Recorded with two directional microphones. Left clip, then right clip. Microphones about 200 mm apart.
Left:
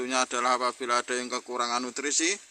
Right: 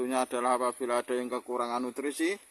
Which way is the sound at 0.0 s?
15° right (ahead or behind).